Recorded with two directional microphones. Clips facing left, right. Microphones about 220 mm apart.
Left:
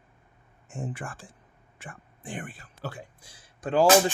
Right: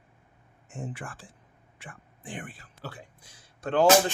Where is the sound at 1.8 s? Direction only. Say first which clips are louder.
Left 2 dB; 50° left (ahead or behind).